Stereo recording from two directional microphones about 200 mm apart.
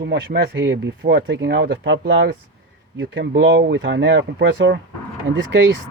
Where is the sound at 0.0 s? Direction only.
55° right (ahead or behind).